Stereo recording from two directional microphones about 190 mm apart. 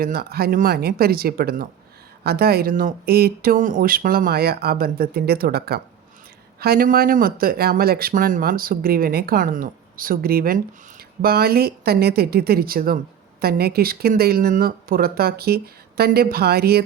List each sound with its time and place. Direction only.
0.0 s speech: 50° right (ahead or behind)